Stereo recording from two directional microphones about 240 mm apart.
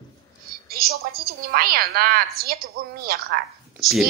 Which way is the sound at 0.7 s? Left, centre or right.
Right.